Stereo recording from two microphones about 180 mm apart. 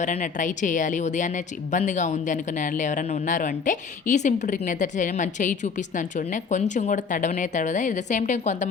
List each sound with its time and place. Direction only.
0.0 s a woman's voice: 45° left (ahead or behind)